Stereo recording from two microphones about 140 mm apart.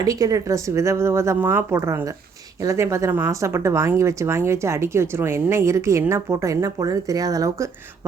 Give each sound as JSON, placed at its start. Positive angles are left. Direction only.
{"t": 0.0, "sound": "speech", "side_deg": -25}